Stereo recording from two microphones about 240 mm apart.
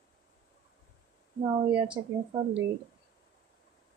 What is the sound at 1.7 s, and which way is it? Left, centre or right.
Speech, right.